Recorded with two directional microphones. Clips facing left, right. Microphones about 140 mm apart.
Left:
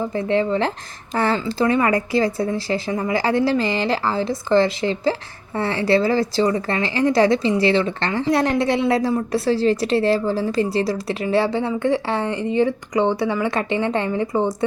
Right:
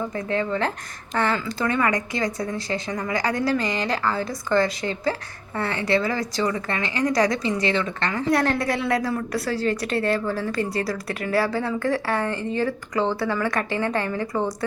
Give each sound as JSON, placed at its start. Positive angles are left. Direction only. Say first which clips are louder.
{"t": 0.1, "sound": "a woman's voice", "louder": "left 5 dB", "side_deg": 30}